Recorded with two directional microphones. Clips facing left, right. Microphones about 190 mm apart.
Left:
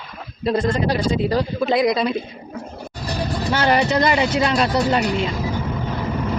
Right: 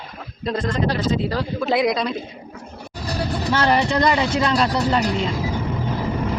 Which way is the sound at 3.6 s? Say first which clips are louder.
Left 1 dB; 15° left (ahead or behind).